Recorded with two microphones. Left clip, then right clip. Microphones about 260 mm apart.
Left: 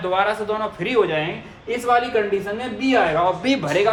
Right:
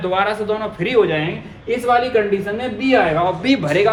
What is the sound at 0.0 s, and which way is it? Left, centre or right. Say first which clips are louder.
A man's voice: right 2 dB; centre.